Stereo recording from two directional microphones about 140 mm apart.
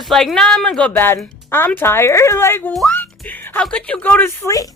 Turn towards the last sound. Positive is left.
turn(degrees=15)  # may be behind; listen again after turning